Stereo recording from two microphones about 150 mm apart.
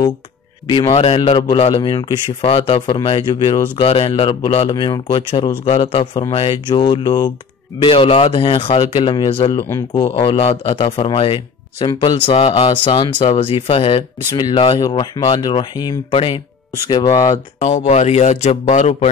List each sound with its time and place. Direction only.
0.7 s a man's voice: 35° left (ahead or behind)
17.6 s speech: 50° left (ahead or behind)